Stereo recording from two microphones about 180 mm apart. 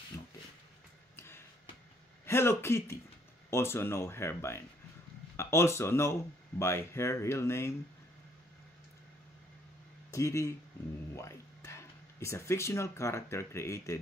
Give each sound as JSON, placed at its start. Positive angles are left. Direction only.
{"t": 1.1, "sound": "a sound", "side_deg": 15}
{"t": 2.2, "sound": "a man's voice", "side_deg": 15}
{"t": 10.1, "sound": "speech", "side_deg": 15}